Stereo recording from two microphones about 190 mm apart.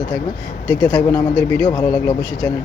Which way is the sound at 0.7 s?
10° left (ahead or behind).